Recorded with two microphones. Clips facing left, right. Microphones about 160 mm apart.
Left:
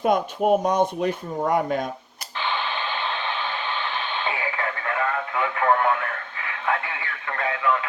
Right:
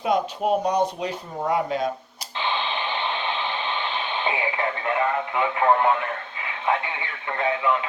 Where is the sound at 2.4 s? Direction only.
20° right (ahead or behind).